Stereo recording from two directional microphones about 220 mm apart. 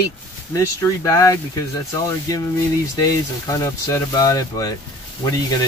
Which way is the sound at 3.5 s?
15° left (ahead or behind).